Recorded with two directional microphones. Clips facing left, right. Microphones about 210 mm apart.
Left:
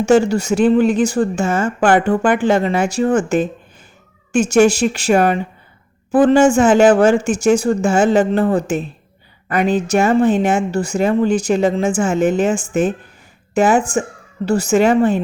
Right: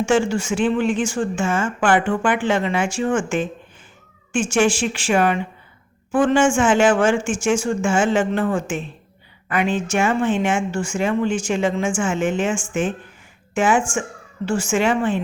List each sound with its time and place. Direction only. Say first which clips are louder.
0.0 s speech: left 5 dB; 40° left (ahead or behind)